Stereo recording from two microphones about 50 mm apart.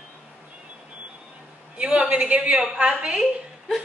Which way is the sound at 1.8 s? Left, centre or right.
Right.